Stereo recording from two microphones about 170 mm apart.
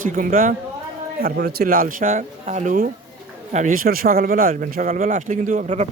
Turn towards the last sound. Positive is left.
turn(degrees=-45)  # may be behind; listen again after turning